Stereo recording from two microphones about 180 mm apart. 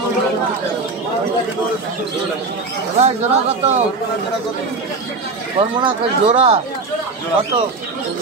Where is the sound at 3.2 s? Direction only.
35° right (ahead or behind).